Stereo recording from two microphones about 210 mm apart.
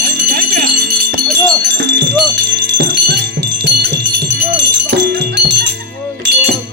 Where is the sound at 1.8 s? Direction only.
60° right (ahead or behind).